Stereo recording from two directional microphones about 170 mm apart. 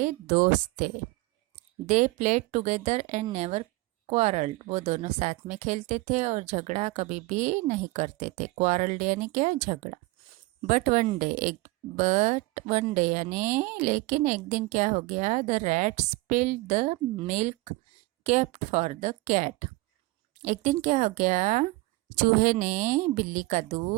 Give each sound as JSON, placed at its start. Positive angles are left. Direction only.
{"t": 0.0, "sound": "a woman's voice", "side_deg": -45}